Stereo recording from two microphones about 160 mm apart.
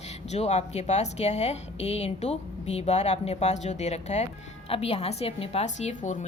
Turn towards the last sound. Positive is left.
turn(degrees=45)  # may be behind; listen again after turning